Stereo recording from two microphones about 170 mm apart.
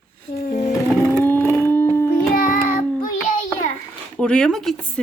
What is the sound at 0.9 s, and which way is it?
Whale vocalization, 10° left (ahead or behind).